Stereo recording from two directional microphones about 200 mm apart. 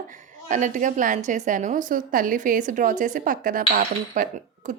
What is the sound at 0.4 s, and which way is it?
A woman's voice, 40° right (ahead or behind).